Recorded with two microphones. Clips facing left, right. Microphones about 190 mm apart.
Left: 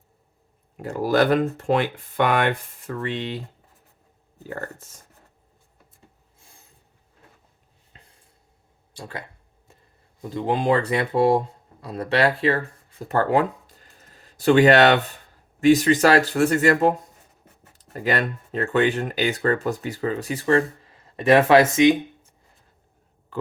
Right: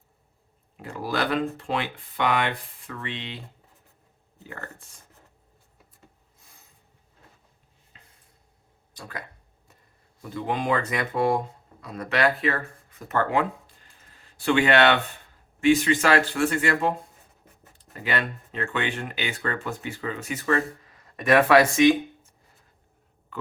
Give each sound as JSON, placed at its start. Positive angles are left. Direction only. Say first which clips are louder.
{"t": 0.8, "sound": "speech", "louder": "left 8 dB", "side_deg": 45}
{"t": 4.4, "sound": "speech", "louder": "left 7 dB", "side_deg": 40}
{"t": 8.9, "sound": "speech", "louder": "left 3 dB", "side_deg": 30}
{"t": 13.9, "sound": "a sound", "louder": "left 5 dB", "side_deg": 40}
{"t": 15.6, "sound": "speech", "louder": "left 4 dB", "side_deg": 40}
{"t": 17.9, "sound": "speech", "louder": "left 5 dB", "side_deg": 40}